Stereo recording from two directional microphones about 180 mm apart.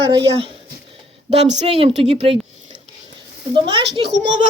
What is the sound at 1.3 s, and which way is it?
A woman's voice, 40° right (ahead or behind).